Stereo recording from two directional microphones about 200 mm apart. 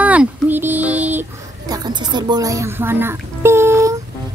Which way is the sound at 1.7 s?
20° right (ahead or behind).